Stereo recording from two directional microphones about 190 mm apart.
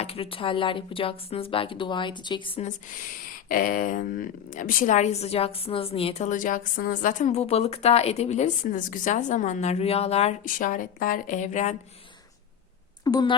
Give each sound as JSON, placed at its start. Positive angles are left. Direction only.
{"t": 0.0, "sound": "a woman's voice", "side_deg": 30}
{"t": 13.1, "sound": "speech", "side_deg": 20}